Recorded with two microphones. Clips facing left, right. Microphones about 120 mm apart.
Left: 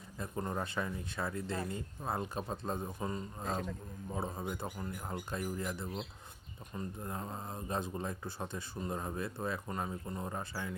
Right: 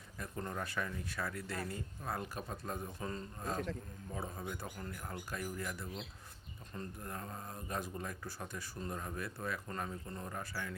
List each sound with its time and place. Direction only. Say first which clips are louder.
0.2 s speech: left 4 dB; 25° left (ahead or behind)